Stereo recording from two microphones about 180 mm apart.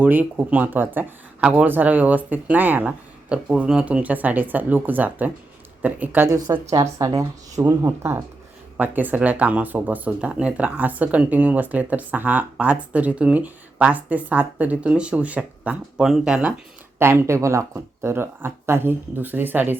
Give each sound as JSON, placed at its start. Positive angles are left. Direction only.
{"t": 0.0, "sound": "speech", "side_deg": -10}